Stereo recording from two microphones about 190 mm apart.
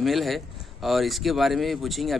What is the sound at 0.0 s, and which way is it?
A man's voice, centre (ahead or behind).